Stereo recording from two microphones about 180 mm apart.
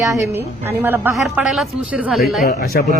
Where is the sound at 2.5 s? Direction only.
55° left (ahead or behind).